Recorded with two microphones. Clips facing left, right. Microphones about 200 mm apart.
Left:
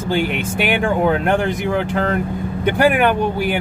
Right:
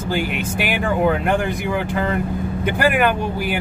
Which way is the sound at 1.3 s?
60° left (ahead or behind).